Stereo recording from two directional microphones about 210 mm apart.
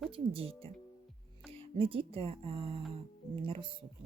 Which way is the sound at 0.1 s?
25° right (ahead or behind).